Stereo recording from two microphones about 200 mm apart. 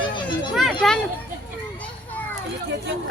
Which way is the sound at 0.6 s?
Centre (ahead or behind).